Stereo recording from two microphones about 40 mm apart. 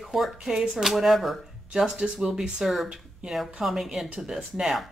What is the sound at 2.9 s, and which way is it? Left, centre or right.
Speech, centre.